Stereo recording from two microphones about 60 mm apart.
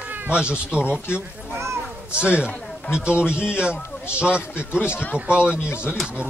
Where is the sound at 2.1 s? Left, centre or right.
Centre.